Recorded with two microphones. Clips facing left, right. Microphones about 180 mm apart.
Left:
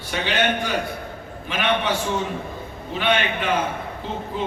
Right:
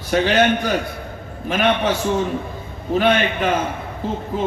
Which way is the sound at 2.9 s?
45° right (ahead or behind).